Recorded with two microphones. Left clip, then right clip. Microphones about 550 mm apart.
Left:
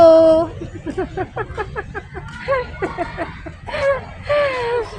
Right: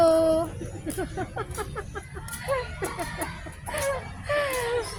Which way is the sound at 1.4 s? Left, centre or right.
Centre.